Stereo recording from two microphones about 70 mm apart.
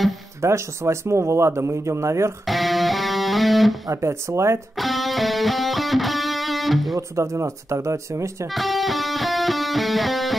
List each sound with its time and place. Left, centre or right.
0.4 s speech: right
2.4 s music: centre
3.9 s speech: right
4.7 s music: centre
7.0 s speech: right
8.5 s music: centre